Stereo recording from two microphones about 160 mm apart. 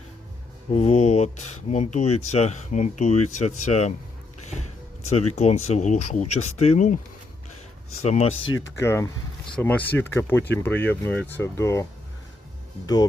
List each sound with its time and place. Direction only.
0.7 s speech: 40° left (ahead or behind)
5.0 s speech: 40° left (ahead or behind)
8.0 s speech: 45° left (ahead or behind)
8.8 s speech: 15° left (ahead or behind)